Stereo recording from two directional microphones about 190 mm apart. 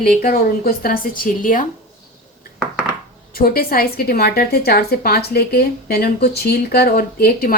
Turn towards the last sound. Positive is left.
turn(degrees=50)  # may be behind; listen again after turning